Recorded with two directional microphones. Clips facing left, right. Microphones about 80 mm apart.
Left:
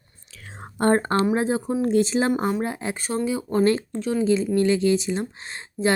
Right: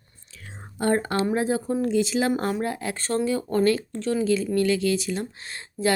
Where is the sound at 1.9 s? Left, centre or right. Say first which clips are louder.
Left 3 dB; left; by 3.6 s centre.